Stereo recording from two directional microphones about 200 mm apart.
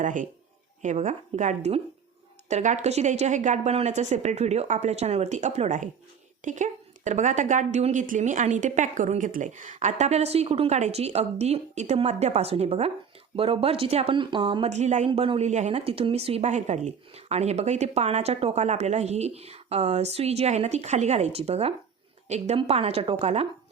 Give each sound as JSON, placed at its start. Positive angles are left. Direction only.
{"t": 0.0, "sound": "a woman's voice", "side_deg": -40}
{"t": 14.7, "sound": "a woman's voice", "side_deg": -35}